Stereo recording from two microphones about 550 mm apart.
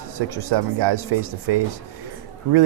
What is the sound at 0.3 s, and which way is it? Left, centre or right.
Speech, right.